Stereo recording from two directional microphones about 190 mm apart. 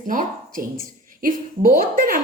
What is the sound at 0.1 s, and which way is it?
A woman's voice, 45° right (ahead or behind).